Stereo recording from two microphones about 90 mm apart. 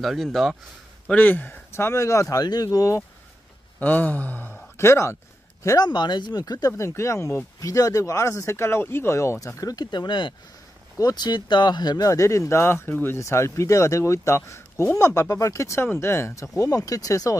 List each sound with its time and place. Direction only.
0.0 s speech: centre (ahead or behind)
1.0 s speech: 15° left (ahead or behind); by 3.0 s 40° left (ahead or behind)
3.8 s speech: 20° left (ahead or behind); by 5.9 s 35° left (ahead or behind)
5.9 s speech: 55° left (ahead or behind)
6.9 s speech: 30° left (ahead or behind)
9.6 s speech: 45° left (ahead or behind); by 10.3 s 60° left (ahead or behind)
11.0 s speech: 50° left (ahead or behind)